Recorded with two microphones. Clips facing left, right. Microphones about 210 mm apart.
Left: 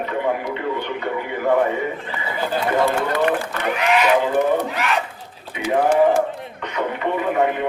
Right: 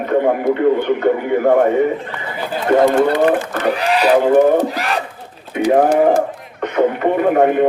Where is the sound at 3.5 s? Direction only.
35° right (ahead or behind).